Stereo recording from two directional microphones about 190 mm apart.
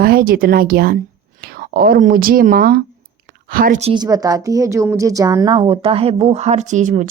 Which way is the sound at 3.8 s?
30° right (ahead or behind).